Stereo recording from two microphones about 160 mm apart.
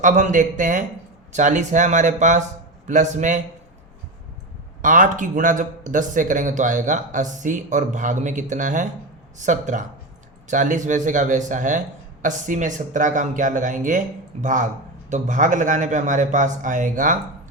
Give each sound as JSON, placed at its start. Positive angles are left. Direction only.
{"t": 0.0, "sound": "speech", "side_deg": -50}
{"t": 4.8, "sound": "speech", "side_deg": -55}